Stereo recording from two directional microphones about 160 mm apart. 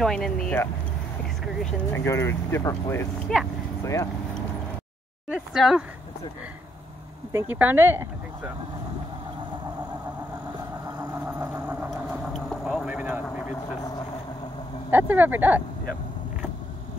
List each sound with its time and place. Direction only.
0.0 s speech: 5° left (ahead or behind)
1.9 s speech: 15° left (ahead or behind)
3.3 s speech: 5° left (ahead or behind)
3.8 s speech: 20° left (ahead or behind)
5.3 s speech: centre (ahead or behind)
7.3 s speech: 10° right (ahead or behind)
11.0 s vehicle: 10° right (ahead or behind)
12.3 s vehicle: centre (ahead or behind)
14.9 s speech: 10° right (ahead or behind)